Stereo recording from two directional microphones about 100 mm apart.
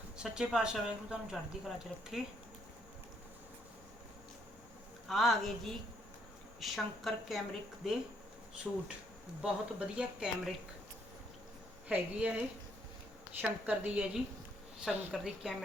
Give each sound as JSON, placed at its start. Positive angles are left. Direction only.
{"t": 0.2, "sound": "speech", "side_deg": -5}
{"t": 5.0, "sound": "speech", "side_deg": 0}
{"t": 11.9, "sound": "speech", "side_deg": -10}